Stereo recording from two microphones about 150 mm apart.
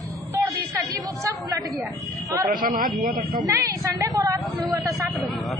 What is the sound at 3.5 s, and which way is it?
Speech, 20° right (ahead or behind).